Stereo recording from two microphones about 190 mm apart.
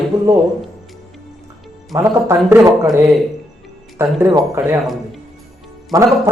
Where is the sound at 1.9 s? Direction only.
15° right (ahead or behind).